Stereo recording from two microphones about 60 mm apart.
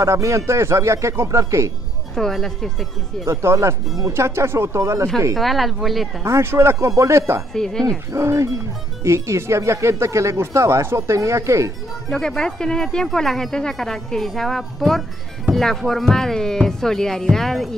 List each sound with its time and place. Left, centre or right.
0.0 s speech: right
2.1 s speech: centre
3.3 s speech: right
5.3 s speech: centre
6.2 s speech: right
7.5 s speech: centre
8.1 s speech: right
12.1 s speech: centre